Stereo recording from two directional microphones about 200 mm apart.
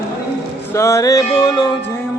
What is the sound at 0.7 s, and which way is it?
Male singing, 15° left (ahead or behind).